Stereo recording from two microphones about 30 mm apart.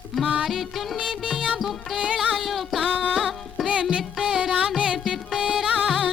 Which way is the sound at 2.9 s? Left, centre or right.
Right.